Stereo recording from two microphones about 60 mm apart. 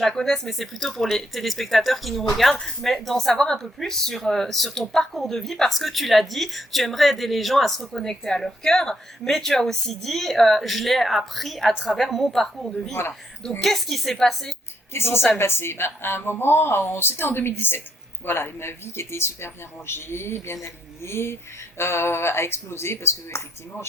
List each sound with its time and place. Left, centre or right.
0.0 s speech: centre
12.9 s speech: left
13.6 s speech: centre
14.9 s a woman's voice: left